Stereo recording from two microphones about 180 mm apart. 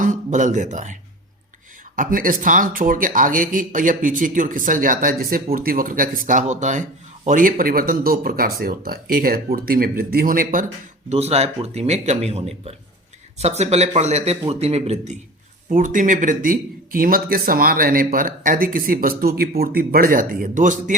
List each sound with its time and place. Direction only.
0.0 s speech: 45° right (ahead or behind)
2.0 s speech: 50° right (ahead or behind)
11.1 s speech: 35° right (ahead or behind)
15.7 s speech: 50° right (ahead or behind)